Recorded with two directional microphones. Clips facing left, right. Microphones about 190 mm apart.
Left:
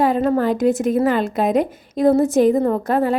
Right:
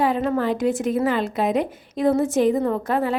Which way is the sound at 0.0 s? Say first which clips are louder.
Left 4 dB; 40° left (ahead or behind).